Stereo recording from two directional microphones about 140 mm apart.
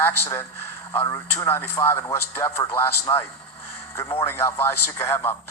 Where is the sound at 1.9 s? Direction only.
20° left (ahead or behind).